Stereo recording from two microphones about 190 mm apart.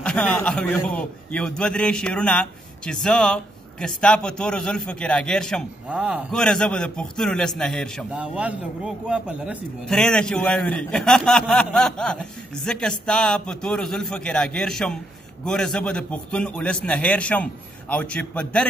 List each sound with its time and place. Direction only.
0.0 s a man's voice: 5° left (ahead or behind)